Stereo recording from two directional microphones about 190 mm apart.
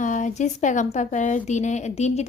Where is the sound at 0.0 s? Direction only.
40° left (ahead or behind).